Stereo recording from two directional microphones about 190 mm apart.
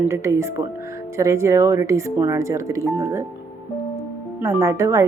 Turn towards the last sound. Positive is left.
turn(degrees=-15)  # may be behind; listen again after turning